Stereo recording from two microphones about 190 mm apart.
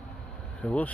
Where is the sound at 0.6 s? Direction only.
5° left (ahead or behind).